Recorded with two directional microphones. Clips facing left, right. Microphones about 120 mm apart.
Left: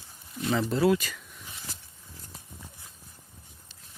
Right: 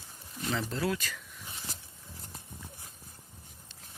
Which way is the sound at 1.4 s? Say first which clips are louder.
Even; 35° right (ahead or behind).